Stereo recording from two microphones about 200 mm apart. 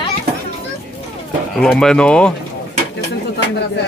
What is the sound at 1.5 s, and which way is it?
Speech, 5° left (ahead or behind).